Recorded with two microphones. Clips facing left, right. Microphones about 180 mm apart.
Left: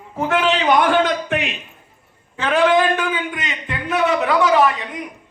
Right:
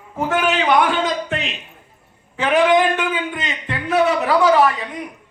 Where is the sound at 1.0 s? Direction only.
65° left (ahead or behind).